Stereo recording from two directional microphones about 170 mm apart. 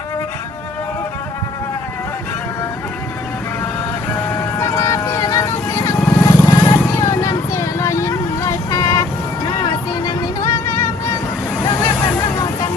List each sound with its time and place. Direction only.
4.6 s music: 20° left (ahead or behind)
6.0 s vehicle: 15° left (ahead or behind)
10.0 s music: 20° left (ahead or behind)
11.6 s vehicle: 25° left (ahead or behind)